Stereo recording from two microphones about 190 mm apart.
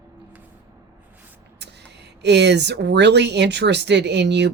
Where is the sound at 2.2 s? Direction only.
65° right (ahead or behind).